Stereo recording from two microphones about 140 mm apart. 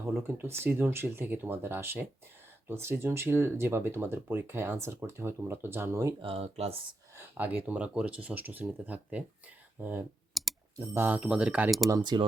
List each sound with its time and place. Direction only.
0.0 s speech: 15° right (ahead or behind)
6.2 s speech: 45° right (ahead or behind)
7.2 s speech: 10° right (ahead or behind)
10.4 s computer keyboard: centre (ahead or behind)
10.8 s speech: 15° right (ahead or behind)
11.9 s speech: 30° right (ahead or behind)